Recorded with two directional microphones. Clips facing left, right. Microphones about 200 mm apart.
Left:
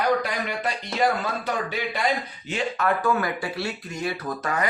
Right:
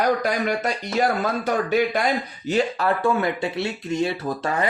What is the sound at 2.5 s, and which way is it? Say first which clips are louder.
Speech: right 4 dB; 30° right (ahead or behind).